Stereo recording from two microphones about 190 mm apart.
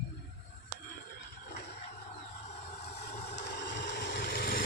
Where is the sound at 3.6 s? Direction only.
70° left (ahead or behind); by 4.6 s 50° left (ahead or behind).